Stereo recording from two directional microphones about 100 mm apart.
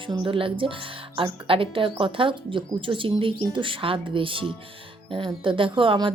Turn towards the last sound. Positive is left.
turn(degrees=-55)  # may be behind; listen again after turning